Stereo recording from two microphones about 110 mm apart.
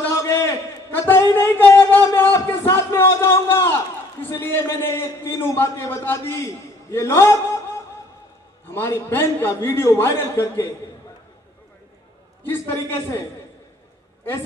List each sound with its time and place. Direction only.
0.1 s a sound: 25° left (ahead or behind)
4.3 s a man's voice: 20° left (ahead or behind)
8.6 s a man's voice: 20° left (ahead or behind)
12.4 s a man's voice: 20° left (ahead or behind)